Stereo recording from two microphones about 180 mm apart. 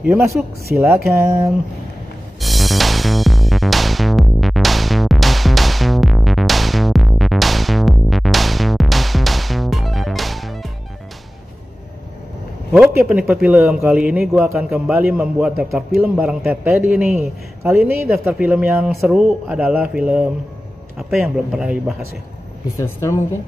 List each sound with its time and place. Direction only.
0.8 s a man's voice: centre (ahead or behind)
2.4 s music: centre (ahead or behind)
12.7 s a man's voice: 5° right (ahead or behind)
22.8 s speech: 15° left (ahead or behind)